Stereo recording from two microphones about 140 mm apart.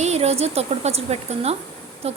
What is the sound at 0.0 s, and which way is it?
A woman's voice, 50° right (ahead or behind).